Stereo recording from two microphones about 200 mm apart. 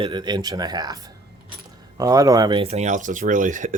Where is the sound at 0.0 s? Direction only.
20° right (ahead or behind).